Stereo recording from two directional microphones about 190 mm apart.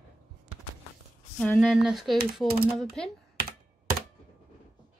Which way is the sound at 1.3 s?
Centre (ahead or behind).